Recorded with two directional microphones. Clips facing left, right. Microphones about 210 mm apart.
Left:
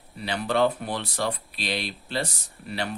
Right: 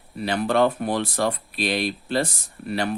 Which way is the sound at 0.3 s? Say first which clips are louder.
Right 3 dB; 50° right (ahead or behind).